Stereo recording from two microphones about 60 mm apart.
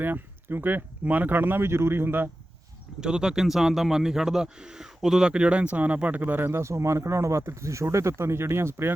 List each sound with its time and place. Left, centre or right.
0.0 s speech: right
3.0 s a man's voice: centre; by 6.6 s right
6.6 s speech: right